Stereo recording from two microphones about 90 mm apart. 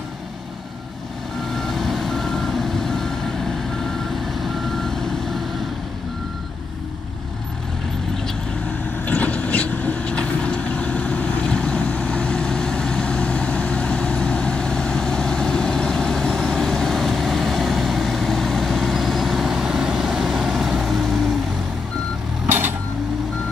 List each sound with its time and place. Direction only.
1.5 s reversing beeps: centre (ahead or behind)
9.0 s vehicle: 15° left (ahead or behind); by 21.3 s centre (ahead or behind)
22.5 s a sound: 25° right (ahead or behind)